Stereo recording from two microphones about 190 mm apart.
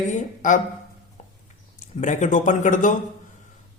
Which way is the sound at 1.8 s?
40° left (ahead or behind).